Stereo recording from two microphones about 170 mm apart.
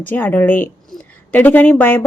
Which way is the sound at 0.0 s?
10° left (ahead or behind).